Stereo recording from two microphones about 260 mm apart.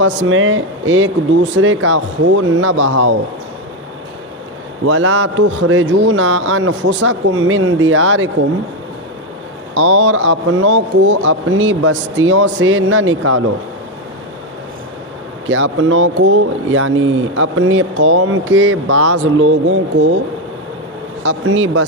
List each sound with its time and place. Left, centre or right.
0.0 s speech: right
4.9 s speech: right
9.7 s speech: right
15.4 s speech: right
21.2 s speech: right